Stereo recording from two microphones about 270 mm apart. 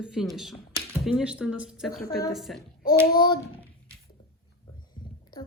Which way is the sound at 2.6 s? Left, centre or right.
Left.